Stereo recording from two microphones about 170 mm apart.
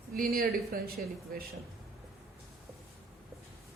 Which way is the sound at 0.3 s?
60° right (ahead or behind).